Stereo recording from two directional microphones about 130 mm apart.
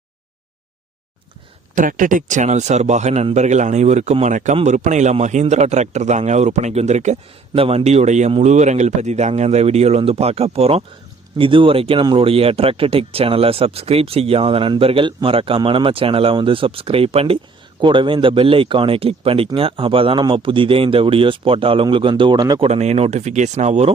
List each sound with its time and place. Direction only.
1.7 s a man's voice: 90° right; by 17.3 s 50° right (ahead or behind)
17.7 s speech: 40° right (ahead or behind)
22.6 s a man's voice: 55° right (ahead or behind)